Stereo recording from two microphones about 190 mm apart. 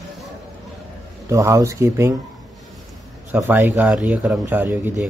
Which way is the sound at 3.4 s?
10° right (ahead or behind).